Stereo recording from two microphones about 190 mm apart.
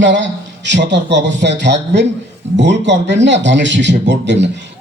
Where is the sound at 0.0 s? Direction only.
70° right (ahead or behind).